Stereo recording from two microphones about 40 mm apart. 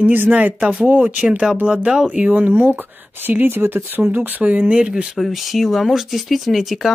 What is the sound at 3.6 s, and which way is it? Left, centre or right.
Speech, right.